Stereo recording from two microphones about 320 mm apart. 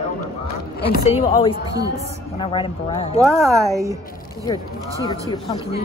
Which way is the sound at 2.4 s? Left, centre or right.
Centre.